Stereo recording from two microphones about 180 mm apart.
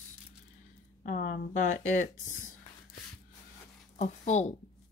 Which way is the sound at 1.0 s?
50° left (ahead or behind).